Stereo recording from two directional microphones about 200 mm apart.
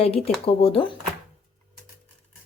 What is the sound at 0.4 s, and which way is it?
Speech, 30° left (ahead or behind).